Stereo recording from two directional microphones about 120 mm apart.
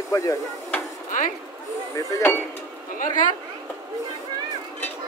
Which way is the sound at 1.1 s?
90° left.